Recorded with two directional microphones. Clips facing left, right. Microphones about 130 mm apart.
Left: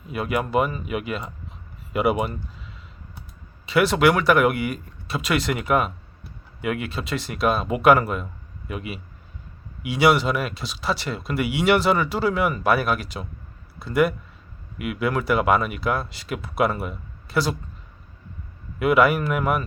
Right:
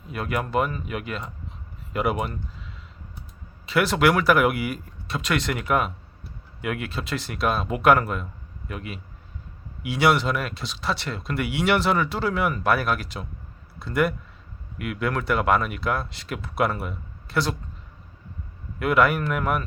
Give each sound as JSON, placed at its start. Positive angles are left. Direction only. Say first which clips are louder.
{"t": 0.1, "sound": "speech", "louder": "left 3 dB", "side_deg": 5}
{"t": 3.7, "sound": "speech", "louder": "left 2 dB", "side_deg": 0}
{"t": 18.8, "sound": "speech", "louder": "left 2 dB", "side_deg": 5}